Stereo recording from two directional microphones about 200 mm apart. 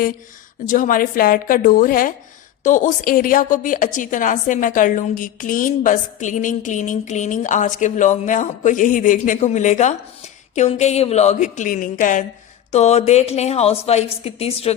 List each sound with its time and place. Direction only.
0.6 s a woman's voice: 40° left (ahead or behind)